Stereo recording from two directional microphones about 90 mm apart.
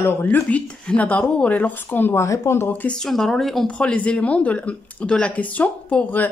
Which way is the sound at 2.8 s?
5° left (ahead or behind).